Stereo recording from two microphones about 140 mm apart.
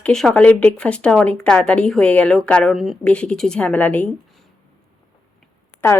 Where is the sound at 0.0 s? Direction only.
5° left (ahead or behind).